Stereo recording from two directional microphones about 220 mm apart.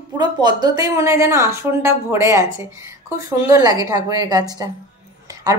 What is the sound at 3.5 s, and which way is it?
A woman's voice, 15° right (ahead or behind).